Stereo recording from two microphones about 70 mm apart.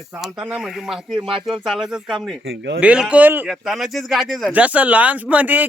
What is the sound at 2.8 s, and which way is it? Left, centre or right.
Speech, centre.